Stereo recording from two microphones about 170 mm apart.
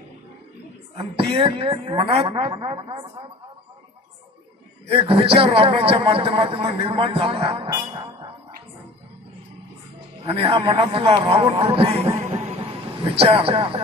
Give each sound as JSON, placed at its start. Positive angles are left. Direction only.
{"t": 0.9, "sound": "a man's voice", "side_deg": -35}
{"t": 4.9, "sound": "a man's voice", "side_deg": -35}
{"t": 10.2, "sound": "a man's voice", "side_deg": -35}
{"t": 12.2, "sound": "music", "side_deg": -40}